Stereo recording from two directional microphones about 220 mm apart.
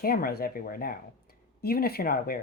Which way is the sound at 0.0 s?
40° left (ahead or behind).